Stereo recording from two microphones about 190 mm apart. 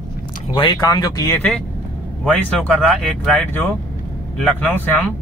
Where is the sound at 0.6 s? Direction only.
20° left (ahead or behind).